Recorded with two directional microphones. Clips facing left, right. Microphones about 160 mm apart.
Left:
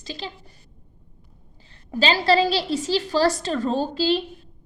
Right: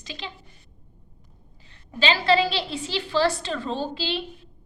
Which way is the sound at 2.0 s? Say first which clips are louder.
Left 2 dB; 40° left (ahead or behind).